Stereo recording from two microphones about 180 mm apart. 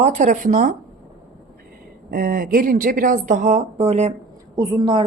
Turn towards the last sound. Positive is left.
turn(degrees=-25)  # may be behind; listen again after turning